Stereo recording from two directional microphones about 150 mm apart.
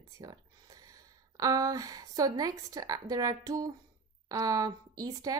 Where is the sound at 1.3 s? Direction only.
25° right (ahead or behind).